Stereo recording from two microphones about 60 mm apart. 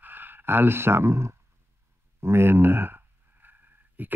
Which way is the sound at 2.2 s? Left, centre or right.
Right.